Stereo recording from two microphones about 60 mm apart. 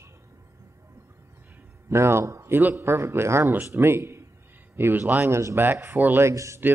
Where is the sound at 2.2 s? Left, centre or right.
Right.